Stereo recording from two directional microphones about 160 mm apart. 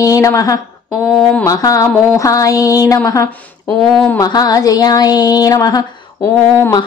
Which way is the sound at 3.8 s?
10° left (ahead or behind).